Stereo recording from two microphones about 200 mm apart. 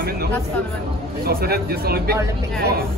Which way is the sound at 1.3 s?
50° right (ahead or behind).